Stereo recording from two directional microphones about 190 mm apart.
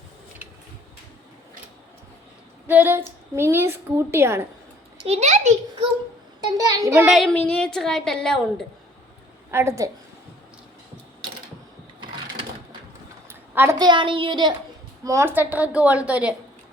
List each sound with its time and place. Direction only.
2.6 s a woman's voice: 10° right (ahead or behind)
5.0 s a child's voice: 35° right (ahead or behind)
6.6 s a woman's voice: 20° right (ahead or behind)
7.1 s a woman's voice: 5° left (ahead or behind)
9.5 s a woman's voice: 15° right (ahead or behind)
13.2 s a woman's voice: 10° right (ahead or behind)